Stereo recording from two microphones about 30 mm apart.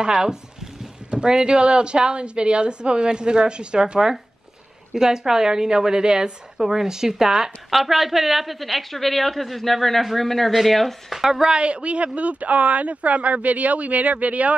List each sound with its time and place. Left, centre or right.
0.0 s a woman's voice: right
6.6 s a woman's voice: centre
7.7 s a woman's voice: centre
11.1 s a woman's voice: centre
11.5 s a woman's voice: right
12.2 s speech: right